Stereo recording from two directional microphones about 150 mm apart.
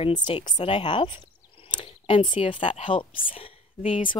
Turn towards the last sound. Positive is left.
turn(degrees=40)  # may be behind; listen again after turning